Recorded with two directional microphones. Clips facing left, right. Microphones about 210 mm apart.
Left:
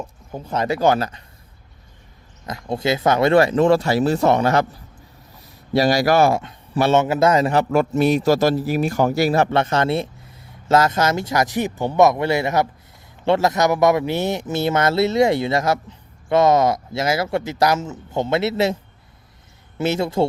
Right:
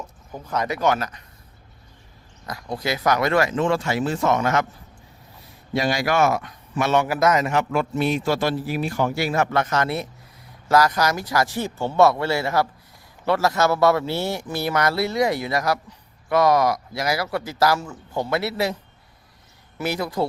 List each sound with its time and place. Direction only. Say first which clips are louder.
0.3 s speech: left 3 dB; 25° left (ahead or behind)
2.5 s a man's voice: left 5 dB; 25° left (ahead or behind)
5.7 s a man's voice: left 6 dB; 40° left (ahead or behind)
19.8 s speech: left 5 dB; 25° left (ahead or behind)